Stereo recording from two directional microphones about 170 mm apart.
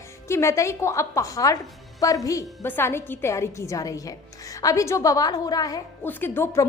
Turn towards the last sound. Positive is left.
turn(degrees=10)  # may be behind; listen again after turning